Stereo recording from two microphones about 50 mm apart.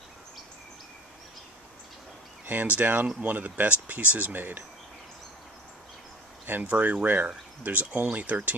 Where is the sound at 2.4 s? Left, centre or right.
Right.